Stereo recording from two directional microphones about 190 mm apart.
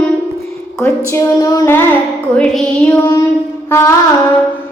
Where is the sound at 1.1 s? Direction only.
15° left (ahead or behind).